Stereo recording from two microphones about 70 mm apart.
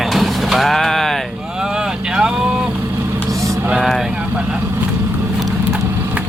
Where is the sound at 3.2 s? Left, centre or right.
Right.